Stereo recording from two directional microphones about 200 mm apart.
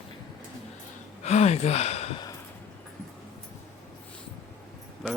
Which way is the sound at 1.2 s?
35° left (ahead or behind).